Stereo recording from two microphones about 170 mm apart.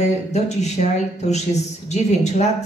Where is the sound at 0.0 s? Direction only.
40° left (ahead or behind).